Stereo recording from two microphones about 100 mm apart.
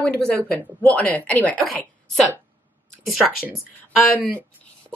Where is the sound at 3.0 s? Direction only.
Centre (ahead or behind).